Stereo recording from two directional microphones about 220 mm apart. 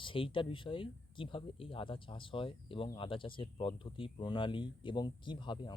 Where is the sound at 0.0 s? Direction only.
25° left (ahead or behind).